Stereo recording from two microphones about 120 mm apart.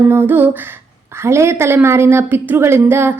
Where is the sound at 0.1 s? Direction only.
15° right (ahead or behind).